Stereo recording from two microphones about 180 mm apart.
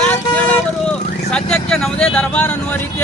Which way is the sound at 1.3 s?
5° left (ahead or behind).